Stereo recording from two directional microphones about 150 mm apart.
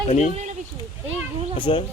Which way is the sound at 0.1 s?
55° left (ahead or behind).